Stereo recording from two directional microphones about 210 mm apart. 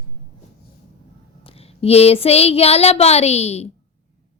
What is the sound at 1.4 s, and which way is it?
Child singing, 30° left (ahead or behind).